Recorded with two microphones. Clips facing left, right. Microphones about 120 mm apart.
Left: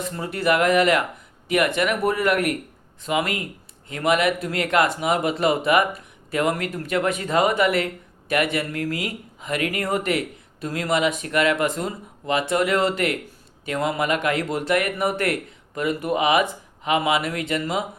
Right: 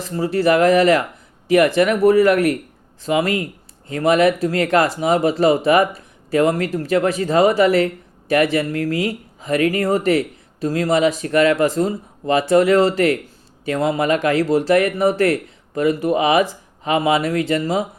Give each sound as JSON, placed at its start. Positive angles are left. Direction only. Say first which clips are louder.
{"t": 0.0, "sound": "speech", "louder": "right 7 dB", "side_deg": -35}